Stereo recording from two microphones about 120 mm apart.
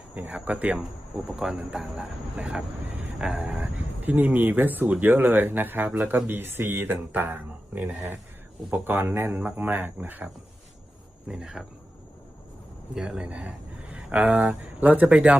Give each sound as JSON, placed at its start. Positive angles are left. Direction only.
{"t": 0.1, "sound": "speech", "side_deg": -10}
{"t": 11.3, "sound": "speech", "side_deg": -5}
{"t": 12.9, "sound": "speech", "side_deg": -5}